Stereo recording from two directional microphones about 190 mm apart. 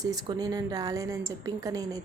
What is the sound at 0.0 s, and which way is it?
A woman's voice, 20° right (ahead or behind).